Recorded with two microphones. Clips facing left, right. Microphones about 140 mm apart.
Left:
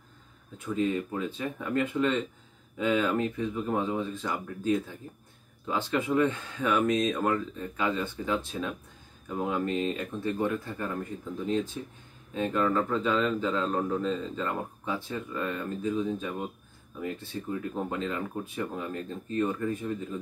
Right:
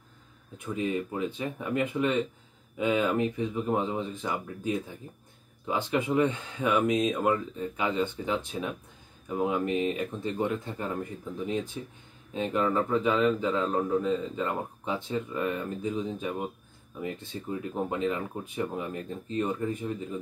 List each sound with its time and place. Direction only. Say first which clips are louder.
0.7 s speech: left 1 dB; 15° right (ahead or behind)